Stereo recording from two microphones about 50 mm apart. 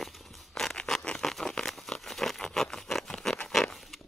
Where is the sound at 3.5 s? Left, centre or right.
Centre.